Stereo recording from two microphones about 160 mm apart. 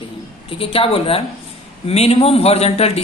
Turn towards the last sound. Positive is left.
turn(degrees=40)  # may be behind; listen again after turning